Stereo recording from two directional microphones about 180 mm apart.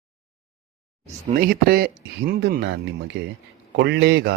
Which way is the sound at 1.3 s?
60° right (ahead or behind).